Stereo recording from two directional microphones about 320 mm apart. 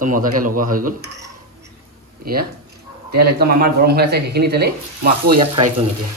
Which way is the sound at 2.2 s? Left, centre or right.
Right.